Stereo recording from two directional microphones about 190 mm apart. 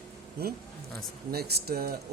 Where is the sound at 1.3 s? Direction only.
55° right (ahead or behind).